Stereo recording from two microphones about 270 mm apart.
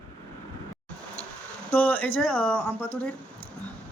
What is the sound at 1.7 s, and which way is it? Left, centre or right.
Speech, centre.